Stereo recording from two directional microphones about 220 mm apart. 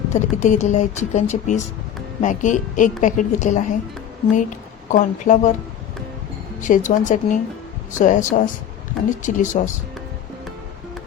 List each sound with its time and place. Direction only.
0.1 s speech: 35° left (ahead or behind)
6.6 s speech: 35° left (ahead or behind)